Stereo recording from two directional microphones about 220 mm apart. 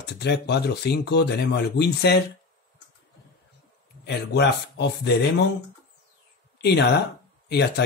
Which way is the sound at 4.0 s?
50° left (ahead or behind).